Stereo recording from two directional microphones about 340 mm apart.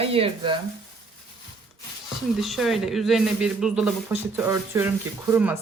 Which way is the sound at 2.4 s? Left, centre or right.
Centre.